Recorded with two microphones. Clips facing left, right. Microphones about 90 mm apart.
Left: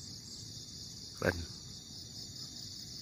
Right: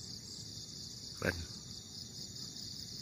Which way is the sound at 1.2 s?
35° left (ahead or behind).